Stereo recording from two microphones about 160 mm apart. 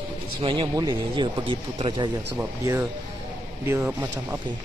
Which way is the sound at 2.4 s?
15° right (ahead or behind).